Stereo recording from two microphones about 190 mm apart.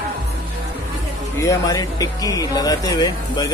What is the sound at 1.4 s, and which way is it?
Speech, 20° left (ahead or behind).